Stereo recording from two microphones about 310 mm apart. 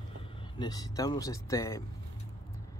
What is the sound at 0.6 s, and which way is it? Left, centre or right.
Speech, centre.